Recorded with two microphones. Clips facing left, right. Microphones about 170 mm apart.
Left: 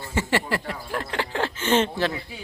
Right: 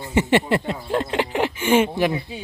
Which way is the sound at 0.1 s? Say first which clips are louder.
Right 7 dB; 20° right (ahead or behind).